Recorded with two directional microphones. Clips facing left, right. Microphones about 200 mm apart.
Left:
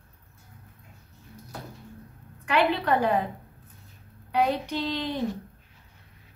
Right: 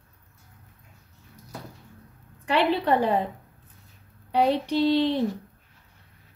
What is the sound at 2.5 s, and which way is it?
Speech, 30° right (ahead or behind).